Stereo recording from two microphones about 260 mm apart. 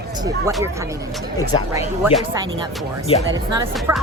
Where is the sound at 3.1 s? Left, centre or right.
Left.